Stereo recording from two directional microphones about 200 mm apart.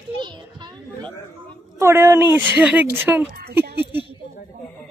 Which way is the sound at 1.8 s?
10° right (ahead or behind).